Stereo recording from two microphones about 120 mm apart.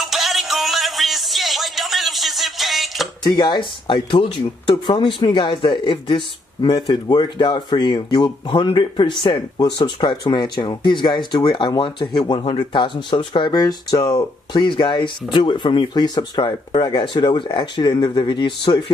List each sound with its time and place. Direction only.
0.0 s music: centre (ahead or behind)
3.3 s speech: 35° left (ahead or behind)